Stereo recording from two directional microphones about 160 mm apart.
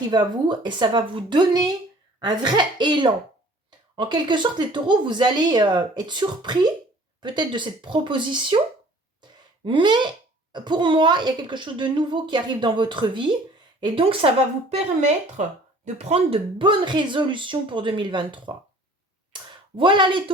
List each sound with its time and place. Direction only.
0.1 s speech: 25° right (ahead or behind)
9.6 s speech: 30° right (ahead or behind)